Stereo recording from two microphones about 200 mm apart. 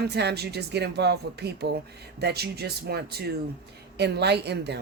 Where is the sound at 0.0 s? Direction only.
55° right (ahead or behind).